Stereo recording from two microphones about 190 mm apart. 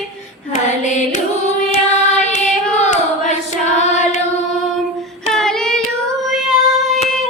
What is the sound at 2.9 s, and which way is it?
Hands, 40° left (ahead or behind).